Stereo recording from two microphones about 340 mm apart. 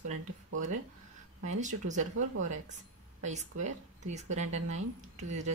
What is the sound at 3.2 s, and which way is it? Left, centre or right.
Speech, centre.